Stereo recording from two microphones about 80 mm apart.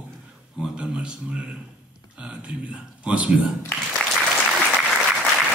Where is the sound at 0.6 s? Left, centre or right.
Centre.